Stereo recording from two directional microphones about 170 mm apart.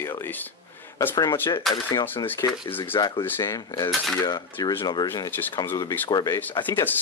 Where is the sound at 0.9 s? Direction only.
20° left (ahead or behind).